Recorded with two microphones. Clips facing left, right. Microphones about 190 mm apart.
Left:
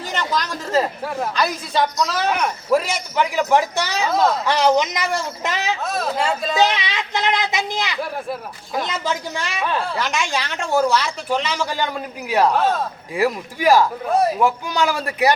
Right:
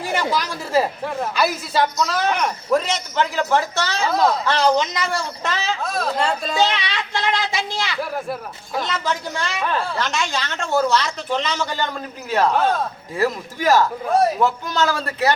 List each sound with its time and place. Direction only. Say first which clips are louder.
0.0 s a woman's voice: right 2 dB; 10° right (ahead or behind); by 4.1 s 15° left (ahead or behind)
4.1 s speech: even; centre (ahead or behind)
4.7 s a woman's voice: left 1 dB; 15° left (ahead or behind)
5.8 s speech: right 2 dB; centre (ahead or behind)
6.6 s a woman's voice: left 2 dB; 15° left (ahead or behind)
8.0 s speech: even; centre (ahead or behind)
9.3 s a woman's voice: even; 15° left (ahead or behind)
13.1 s a woman's voice: left 1 dB; 15° left (ahead or behind)
14.0 s speech: right 1 dB; centre (ahead or behind)
14.4 s a woman's voice: left 1 dB; 15° left (ahead or behind)